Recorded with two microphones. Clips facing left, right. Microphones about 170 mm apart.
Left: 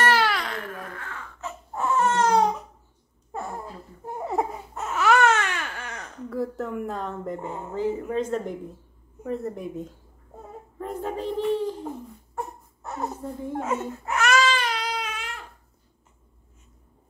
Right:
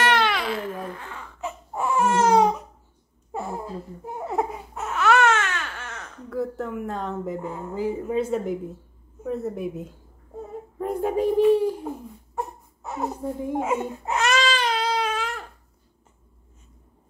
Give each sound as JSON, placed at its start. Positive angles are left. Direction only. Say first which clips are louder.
{"t": 0.0, "sound": "baby cry", "louder": "right 1 dB", "side_deg": 5}
{"t": 0.7, "sound": "baby cry", "louder": "right 4 dB", "side_deg": -20}
{"t": 3.3, "sound": "a sound", "louder": "right 3 dB", "side_deg": -15}
{"t": 4.3, "sound": "baby cry", "louder": "right 1 dB", "side_deg": 0}
{"t": 6.3, "sound": "a woman's voice", "louder": "right 1 dB", "side_deg": 0}
{"t": 12.4, "sound": "a sound", "louder": "right 2 dB", "side_deg": 0}
{"t": 13.5, "sound": "baby cry", "louder": "right 2 dB", "side_deg": -15}